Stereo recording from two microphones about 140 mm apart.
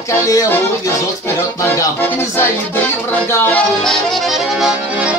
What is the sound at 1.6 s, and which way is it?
Music, 20° left (ahead or behind).